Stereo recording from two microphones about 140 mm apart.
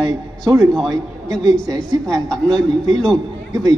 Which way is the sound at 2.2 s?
5° left (ahead or behind).